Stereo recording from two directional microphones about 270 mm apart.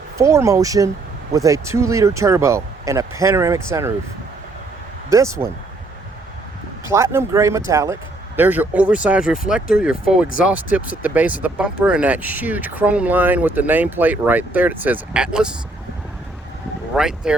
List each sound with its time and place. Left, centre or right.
0.2 s speech: centre
5.0 s speech: centre
6.8 s speech: centre
16.9 s speech: centre